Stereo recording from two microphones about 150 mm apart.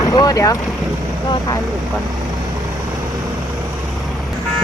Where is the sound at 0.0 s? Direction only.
25° left (ahead or behind).